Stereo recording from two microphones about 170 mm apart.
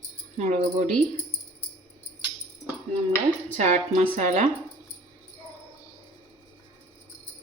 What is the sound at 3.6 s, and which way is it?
Speech, 45° right (ahead or behind).